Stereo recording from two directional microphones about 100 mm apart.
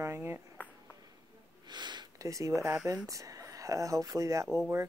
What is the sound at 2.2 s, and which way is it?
Speech, 35° right (ahead or behind).